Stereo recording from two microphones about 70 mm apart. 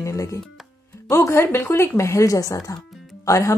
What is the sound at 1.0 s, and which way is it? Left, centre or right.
A woman's voice, left.